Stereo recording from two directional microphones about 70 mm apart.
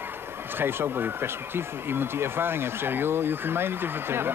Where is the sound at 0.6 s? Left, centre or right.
Right.